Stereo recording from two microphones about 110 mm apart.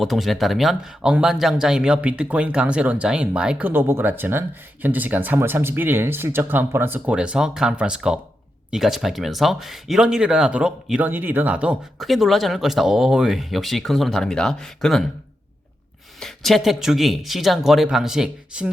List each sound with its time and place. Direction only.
0.0 s speech: centre (ahead or behind)
3.7 s speech: 20° right (ahead or behind)
11.9 s speech: centre (ahead or behind)
16.2 s speech: centre (ahead or behind)